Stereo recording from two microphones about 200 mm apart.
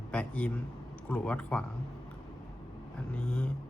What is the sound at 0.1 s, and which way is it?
A man's voice, 5° left (ahead or behind).